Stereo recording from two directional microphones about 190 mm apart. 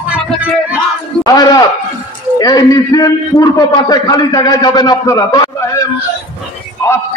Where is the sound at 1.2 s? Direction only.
20° left (ahead or behind).